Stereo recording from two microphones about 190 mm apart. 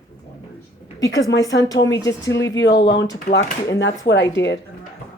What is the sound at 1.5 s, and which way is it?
Speech, 65° left (ahead or behind).